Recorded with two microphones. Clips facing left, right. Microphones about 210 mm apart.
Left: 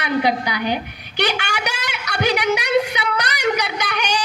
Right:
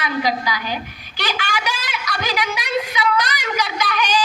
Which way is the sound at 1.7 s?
65° left (ahead or behind).